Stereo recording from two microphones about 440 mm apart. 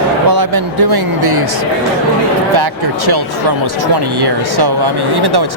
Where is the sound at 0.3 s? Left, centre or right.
Right.